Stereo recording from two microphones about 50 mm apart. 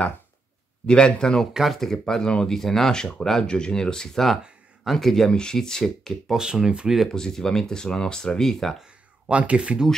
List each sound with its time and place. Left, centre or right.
0.8 s speech: centre
1.5 s speech: centre
1.8 s speech: centre
6.3 s speech: centre
7.1 s speech: centre
9.3 s speech: right